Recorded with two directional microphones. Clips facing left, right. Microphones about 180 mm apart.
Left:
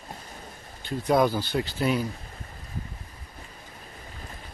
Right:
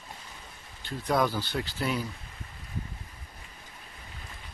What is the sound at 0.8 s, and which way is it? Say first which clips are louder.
Speech: left 5 dB; 15° left (ahead or behind).